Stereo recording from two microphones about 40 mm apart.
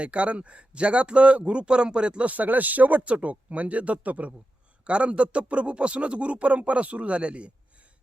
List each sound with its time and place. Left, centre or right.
0.0 s speech: right
2.3 s speech: right